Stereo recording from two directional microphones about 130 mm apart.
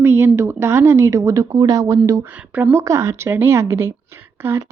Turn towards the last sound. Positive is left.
turn(degrees=-15)  # may be behind; listen again after turning